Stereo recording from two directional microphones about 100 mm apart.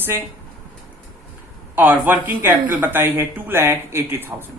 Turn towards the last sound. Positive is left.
turn(degrees=-25)  # may be behind; listen again after turning